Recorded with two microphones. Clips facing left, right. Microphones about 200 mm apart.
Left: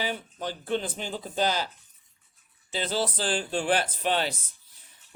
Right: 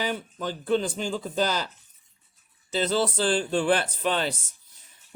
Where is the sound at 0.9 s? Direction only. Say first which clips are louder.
Right 3 dB; 40° right (ahead or behind).